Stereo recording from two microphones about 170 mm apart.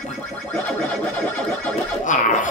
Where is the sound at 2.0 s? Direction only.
50° left (ahead or behind).